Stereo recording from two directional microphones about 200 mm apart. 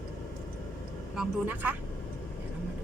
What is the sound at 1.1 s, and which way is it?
Speech, 10° right (ahead or behind).